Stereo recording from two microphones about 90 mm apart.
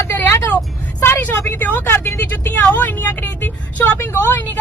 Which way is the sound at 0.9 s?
30° left (ahead or behind).